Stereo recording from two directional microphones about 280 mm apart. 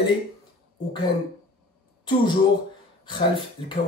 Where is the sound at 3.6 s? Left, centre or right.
Centre.